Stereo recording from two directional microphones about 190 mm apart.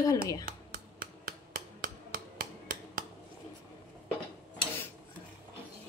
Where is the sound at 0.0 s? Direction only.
20° left (ahead or behind).